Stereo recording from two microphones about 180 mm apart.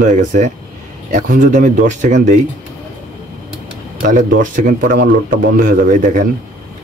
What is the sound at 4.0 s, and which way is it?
Speech, 50° right (ahead or behind).